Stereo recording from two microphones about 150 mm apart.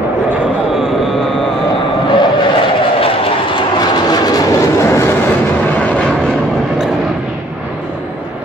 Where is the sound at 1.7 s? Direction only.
35° left (ahead or behind); by 6.9 s centre (ahead or behind).